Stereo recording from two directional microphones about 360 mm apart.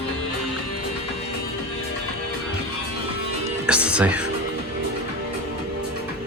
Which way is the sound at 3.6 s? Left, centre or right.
Centre.